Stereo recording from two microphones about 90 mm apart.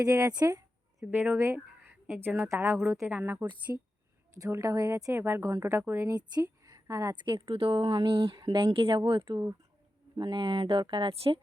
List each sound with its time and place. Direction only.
0.0 s speech: 40° right (ahead or behind)
1.0 s speech: 25° right (ahead or behind)
3.7 s speech: 35° right (ahead or behind)
5.1 s speech: 25° right (ahead or behind)
5.4 s speech: 35° right (ahead or behind)
6.1 s a woman's voice: 50° right (ahead or behind)
7.2 s speech: 65° right (ahead or behind)
10.2 s speech: 60° right (ahead or behind); by 11.3 s 80° right